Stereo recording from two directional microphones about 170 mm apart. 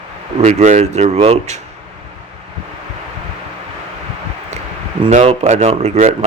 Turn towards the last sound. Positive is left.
turn(degrees=-40)  # may be behind; listen again after turning